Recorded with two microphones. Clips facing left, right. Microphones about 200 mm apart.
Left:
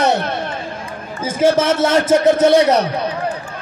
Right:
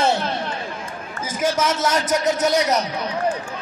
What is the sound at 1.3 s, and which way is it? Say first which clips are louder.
A man's voice: left 7 dB; 30° left (ahead or behind).